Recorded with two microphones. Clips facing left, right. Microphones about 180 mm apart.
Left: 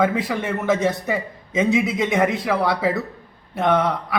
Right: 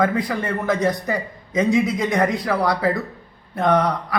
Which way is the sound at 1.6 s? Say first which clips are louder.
Right 1 dB; 25° left (ahead or behind).